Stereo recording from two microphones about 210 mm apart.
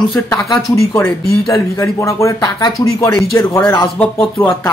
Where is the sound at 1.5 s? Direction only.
15° left (ahead or behind).